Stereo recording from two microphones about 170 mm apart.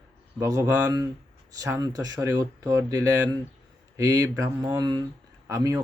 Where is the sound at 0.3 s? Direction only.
20° right (ahead or behind).